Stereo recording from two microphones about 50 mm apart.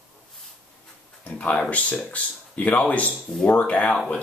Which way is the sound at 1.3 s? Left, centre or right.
Left.